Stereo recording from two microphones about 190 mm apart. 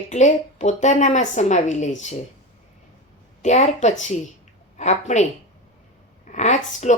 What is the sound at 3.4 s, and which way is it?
Speech, 35° left (ahead or behind).